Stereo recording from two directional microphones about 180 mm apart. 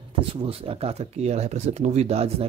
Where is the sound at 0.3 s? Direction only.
30° right (ahead or behind).